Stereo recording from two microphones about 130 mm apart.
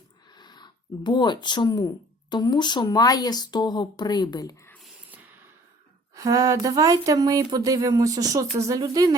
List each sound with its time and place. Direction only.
0.3 s speech: 35° left (ahead or behind)
5.0 s a sound: 15° right (ahead or behind)
6.1 s speech: 25° right (ahead or behind)